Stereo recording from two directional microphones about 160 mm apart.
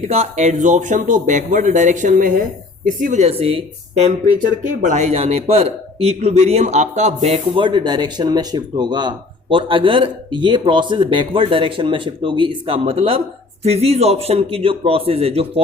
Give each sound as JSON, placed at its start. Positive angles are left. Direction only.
{"t": 0.0, "sound": "speech", "side_deg": -45}
{"t": 4.0, "sound": "speech", "side_deg": -50}